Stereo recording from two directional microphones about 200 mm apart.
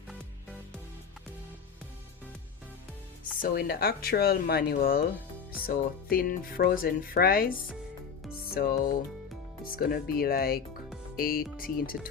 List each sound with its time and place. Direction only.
3.4 s speech: 50° left (ahead or behind)
8.5 s speech: 50° left (ahead or behind)